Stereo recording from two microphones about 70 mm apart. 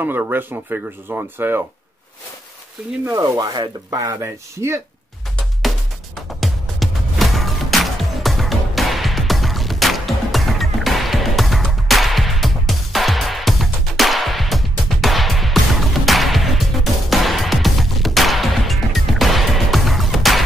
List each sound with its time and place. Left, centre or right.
0.0 s speech: right
3.2 s sanding: right
4.0 s speech: right
6.4 s music: centre